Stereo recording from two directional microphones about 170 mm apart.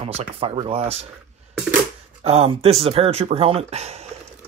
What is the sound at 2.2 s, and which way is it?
Speech, 35° right (ahead or behind).